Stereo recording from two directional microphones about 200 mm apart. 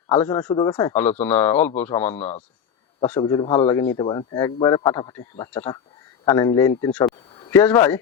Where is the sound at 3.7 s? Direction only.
15° left (ahead or behind).